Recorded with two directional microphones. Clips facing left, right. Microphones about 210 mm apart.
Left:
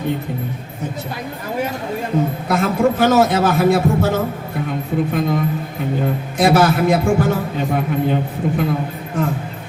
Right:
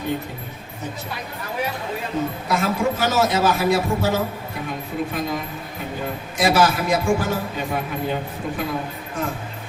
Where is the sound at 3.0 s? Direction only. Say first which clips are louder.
Left 5 dB; 55° left (ahead or behind).